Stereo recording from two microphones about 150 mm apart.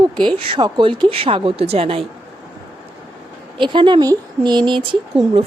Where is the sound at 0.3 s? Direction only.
35° right (ahead or behind).